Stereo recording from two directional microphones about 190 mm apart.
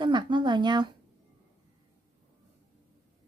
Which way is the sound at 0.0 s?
25° right (ahead or behind).